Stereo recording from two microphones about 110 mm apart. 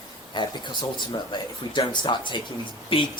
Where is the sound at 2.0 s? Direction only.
45° left (ahead or behind).